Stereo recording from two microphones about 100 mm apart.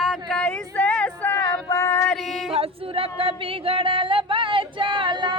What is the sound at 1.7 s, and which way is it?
Female singing, 30° left (ahead or behind).